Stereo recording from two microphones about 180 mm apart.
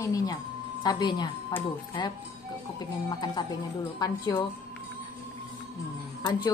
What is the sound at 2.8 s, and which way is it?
Speech, 25° left (ahead or behind).